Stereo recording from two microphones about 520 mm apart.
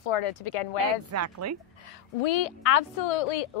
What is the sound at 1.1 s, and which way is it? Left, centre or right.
Speech, right.